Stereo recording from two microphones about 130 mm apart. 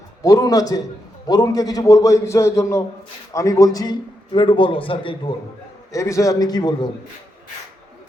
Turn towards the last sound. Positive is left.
turn(degrees=30)  # may be behind; listen again after turning